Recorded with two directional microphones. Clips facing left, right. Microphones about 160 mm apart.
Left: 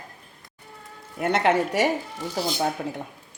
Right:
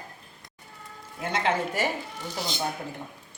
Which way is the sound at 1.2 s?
70° left (ahead or behind).